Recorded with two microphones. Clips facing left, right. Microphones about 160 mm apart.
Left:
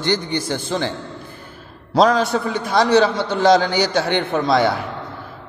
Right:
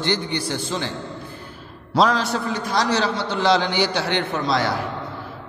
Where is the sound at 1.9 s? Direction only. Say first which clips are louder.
Left 4 dB; 55° left (ahead or behind).